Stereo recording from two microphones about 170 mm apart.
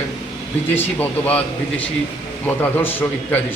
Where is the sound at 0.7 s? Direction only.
10° left (ahead or behind).